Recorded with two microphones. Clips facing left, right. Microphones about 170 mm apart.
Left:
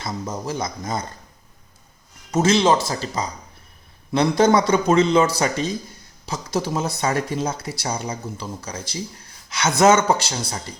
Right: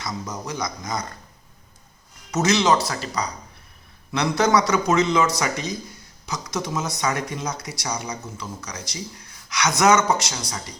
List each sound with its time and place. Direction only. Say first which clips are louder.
0.0 s speech: left 3 dB; 25° left (ahead or behind)
2.3 s speech: left 2 dB; 30° left (ahead or behind)